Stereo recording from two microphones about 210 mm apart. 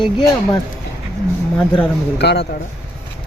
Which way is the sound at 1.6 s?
5° left (ahead or behind).